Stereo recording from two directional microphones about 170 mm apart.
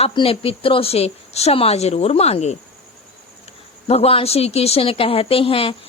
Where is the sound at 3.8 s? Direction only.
35° left (ahead or behind).